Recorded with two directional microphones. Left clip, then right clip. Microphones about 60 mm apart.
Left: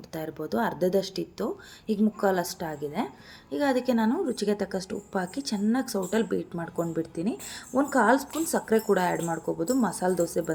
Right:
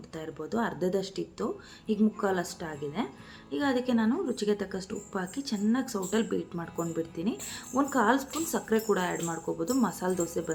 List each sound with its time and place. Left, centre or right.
0.1 s a woman's voice: left
3.9 s a woman's voice: left
9.3 s speech: left